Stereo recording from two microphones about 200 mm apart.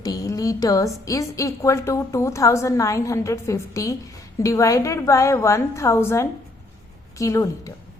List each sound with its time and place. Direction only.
0.0 s a woman's voice: 15° left (ahead or behind)